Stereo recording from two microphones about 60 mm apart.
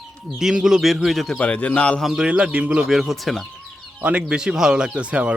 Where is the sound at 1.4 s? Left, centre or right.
Left.